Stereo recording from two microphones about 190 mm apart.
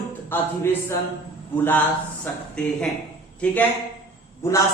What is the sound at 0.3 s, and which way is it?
A man's voice, 10° left (ahead or behind).